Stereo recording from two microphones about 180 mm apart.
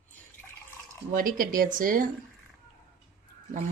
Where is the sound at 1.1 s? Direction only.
50° right (ahead or behind).